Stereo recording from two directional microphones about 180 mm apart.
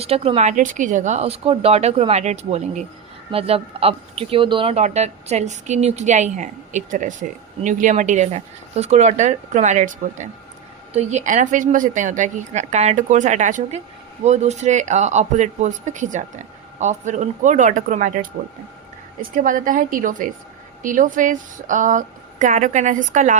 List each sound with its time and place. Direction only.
0.0 s speech: 35° right (ahead or behind)
19.4 s speech: 50° right (ahead or behind)